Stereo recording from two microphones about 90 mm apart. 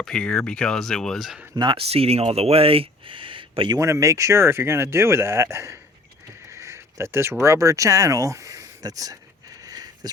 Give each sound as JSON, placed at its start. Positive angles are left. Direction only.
{"t": 0.0, "sound": "speech", "side_deg": 10}
{"t": 1.7, "sound": "speech", "side_deg": -90}
{"t": 3.8, "sound": "speech", "side_deg": -35}
{"t": 9.6, "sound": "a sound", "side_deg": -45}